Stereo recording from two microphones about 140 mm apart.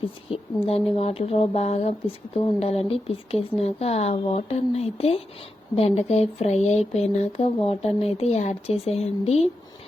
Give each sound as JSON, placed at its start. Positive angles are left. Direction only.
{"t": 0.3, "sound": "speech", "side_deg": 45}